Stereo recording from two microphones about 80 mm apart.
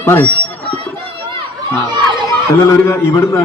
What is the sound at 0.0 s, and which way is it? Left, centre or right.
Speech, left.